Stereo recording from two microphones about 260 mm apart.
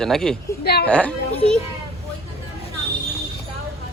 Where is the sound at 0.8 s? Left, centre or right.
Centre.